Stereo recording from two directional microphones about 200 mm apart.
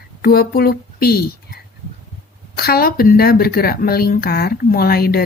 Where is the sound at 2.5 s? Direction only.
50° left (ahead or behind).